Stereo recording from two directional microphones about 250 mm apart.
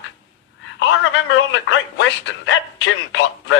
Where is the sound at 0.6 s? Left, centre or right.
Left.